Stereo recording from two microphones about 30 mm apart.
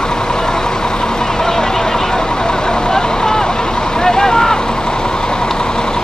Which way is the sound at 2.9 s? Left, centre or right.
Centre.